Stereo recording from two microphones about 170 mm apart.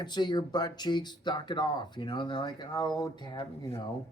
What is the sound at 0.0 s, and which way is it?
Speech, 25° left (ahead or behind).